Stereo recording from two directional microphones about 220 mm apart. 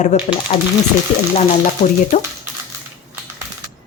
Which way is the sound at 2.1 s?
30° left (ahead or behind).